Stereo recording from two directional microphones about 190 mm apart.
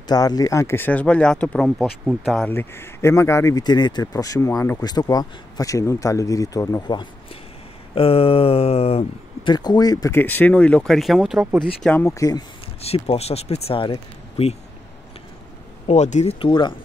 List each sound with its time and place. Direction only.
0.0 s speech: 20° left (ahead or behind)
7.9 s speech: 30° left (ahead or behind); by 11.6 s 5° right (ahead or behind)
11.6 s speech: 5° left (ahead or behind)
12.8 s speech: 30° left (ahead or behind)
15.9 s speech: 35° left (ahead or behind)